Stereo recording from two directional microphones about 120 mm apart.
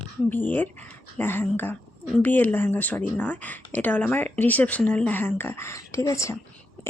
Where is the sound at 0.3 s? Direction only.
15° left (ahead or behind).